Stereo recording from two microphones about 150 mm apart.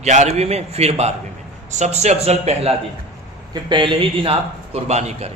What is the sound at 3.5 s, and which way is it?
Speech, 30° right (ahead or behind).